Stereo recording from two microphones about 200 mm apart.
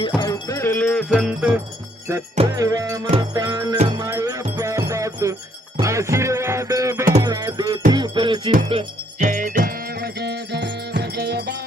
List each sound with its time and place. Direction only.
0.2 s music: 15° left (ahead or behind)
1.1 s music: 5° right (ahead or behind)
2.6 s music: 15° right (ahead or behind)
8.7 s jingle bell: 35° right (ahead or behind)
9.6 s music: 50° right (ahead or behind)